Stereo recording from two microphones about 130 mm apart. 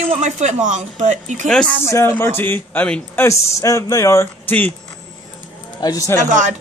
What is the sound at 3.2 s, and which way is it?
Speech, 25° left (ahead or behind).